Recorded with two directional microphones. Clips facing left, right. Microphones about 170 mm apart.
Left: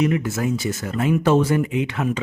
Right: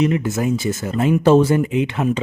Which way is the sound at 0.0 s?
25° right (ahead or behind).